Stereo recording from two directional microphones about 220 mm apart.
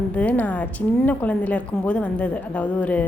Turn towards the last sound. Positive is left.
turn(degrees=5)  # may be behind; listen again after turning